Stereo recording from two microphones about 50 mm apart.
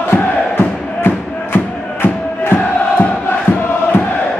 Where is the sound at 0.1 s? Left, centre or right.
Left.